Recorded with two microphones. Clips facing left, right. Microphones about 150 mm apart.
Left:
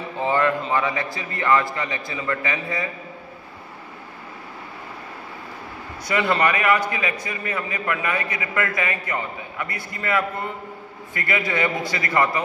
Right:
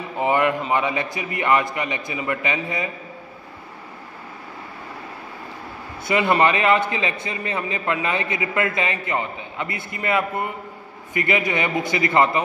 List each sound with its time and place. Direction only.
0.2 s a man's voice: 20° right (ahead or behind)
6.0 s a man's voice: 20° right (ahead or behind)